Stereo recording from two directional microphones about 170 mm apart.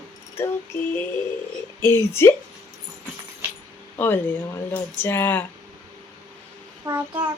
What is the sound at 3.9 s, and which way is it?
Speech, 15° left (ahead or behind).